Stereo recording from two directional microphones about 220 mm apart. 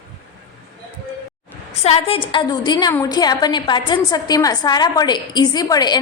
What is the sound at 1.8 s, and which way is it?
A woman's voice, 25° left (ahead or behind).